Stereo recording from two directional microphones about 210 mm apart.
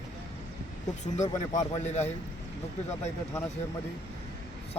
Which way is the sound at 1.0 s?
35° left (ahead or behind).